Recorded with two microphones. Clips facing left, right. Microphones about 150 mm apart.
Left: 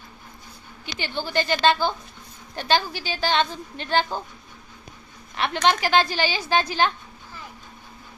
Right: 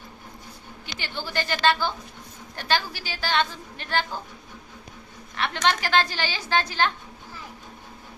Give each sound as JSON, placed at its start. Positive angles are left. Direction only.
{"t": 0.9, "sound": "a woman's voice", "side_deg": 20}
{"t": 5.6, "sound": "a woman's voice", "side_deg": 15}